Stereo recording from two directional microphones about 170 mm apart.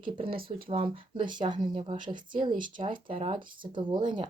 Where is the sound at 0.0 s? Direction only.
30° right (ahead or behind).